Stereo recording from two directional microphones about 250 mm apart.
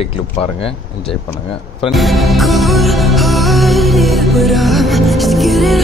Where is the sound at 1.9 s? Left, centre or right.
Centre.